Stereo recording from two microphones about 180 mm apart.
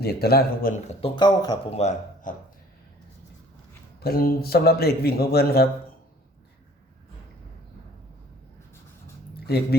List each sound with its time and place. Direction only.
0.0 s a man's voice: 60° left (ahead or behind)
0.9 s speech: 30° left (ahead or behind)
1.7 s speech: 40° left (ahead or behind)
4.0 s a man's voice: 55° left (ahead or behind)